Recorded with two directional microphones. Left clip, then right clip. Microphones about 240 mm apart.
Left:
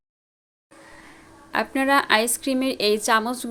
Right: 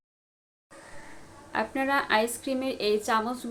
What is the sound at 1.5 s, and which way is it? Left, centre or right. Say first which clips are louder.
A woman's voice: left 6 dB; left.